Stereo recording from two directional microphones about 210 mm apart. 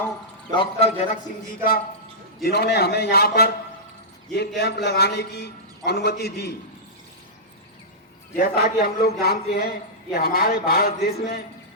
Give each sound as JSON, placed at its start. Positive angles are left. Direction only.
{"t": 0.5, "sound": "a man's voice", "side_deg": 25}
{"t": 2.4, "sound": "a man's voice", "side_deg": 50}
{"t": 8.4, "sound": "a man's voice", "side_deg": 50}